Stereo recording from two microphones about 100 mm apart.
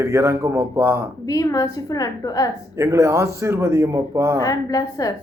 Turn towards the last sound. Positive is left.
turn(degrees=35)  # may be behind; listen again after turning